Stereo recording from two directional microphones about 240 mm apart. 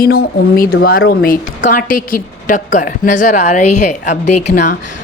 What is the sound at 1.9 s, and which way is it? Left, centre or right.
Speech, left.